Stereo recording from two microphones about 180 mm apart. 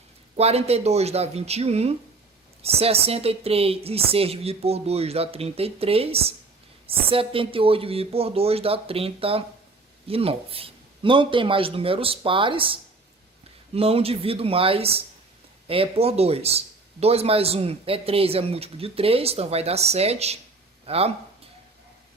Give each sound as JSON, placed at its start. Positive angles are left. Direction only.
{"t": 0.3, "sound": "speech", "side_deg": -35}